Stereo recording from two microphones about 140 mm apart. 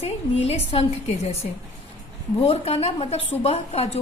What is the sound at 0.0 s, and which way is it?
A woman's voice, 45° left (ahead or behind).